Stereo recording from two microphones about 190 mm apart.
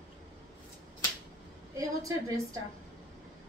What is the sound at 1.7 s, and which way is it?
Speech, 20° right (ahead or behind).